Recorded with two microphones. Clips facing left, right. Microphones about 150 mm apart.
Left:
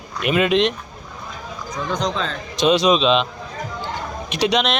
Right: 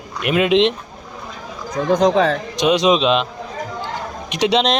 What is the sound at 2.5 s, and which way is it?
Speech, 15° right (ahead or behind).